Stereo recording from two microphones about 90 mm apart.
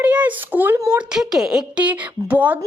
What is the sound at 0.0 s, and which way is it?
Speech, 15° right (ahead or behind).